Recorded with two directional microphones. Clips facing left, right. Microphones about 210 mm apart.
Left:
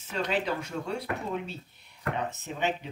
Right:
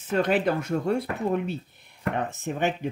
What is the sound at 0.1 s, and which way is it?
Speech, 55° right (ahead or behind).